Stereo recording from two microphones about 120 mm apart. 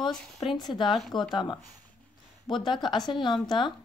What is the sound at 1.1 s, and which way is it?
Speech, 40° left (ahead or behind).